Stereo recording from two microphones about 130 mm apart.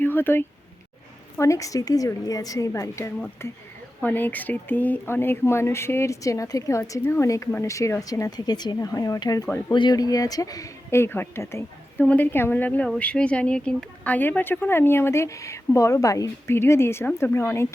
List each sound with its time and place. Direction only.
0.0 s speech: 15° left (ahead or behind)